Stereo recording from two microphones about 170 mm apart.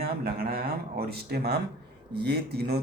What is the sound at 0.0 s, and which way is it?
Speech, 65° right (ahead or behind).